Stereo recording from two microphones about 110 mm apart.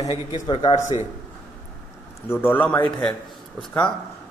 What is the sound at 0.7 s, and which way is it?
Speech, 90° left.